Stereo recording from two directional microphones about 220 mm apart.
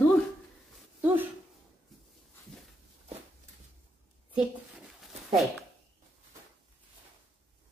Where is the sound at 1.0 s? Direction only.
10° right (ahead or behind).